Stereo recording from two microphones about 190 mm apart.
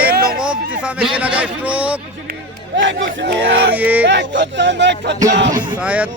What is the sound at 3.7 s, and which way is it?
Speech, 10° right (ahead or behind).